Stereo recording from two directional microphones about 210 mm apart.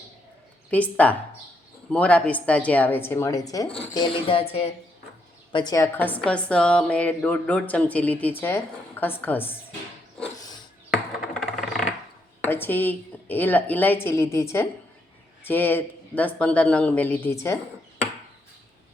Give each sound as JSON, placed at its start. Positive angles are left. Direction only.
{"t": 0.7, "sound": "a woman's voice", "side_deg": 5}
{"t": 12.4, "sound": "a woman's voice", "side_deg": 10}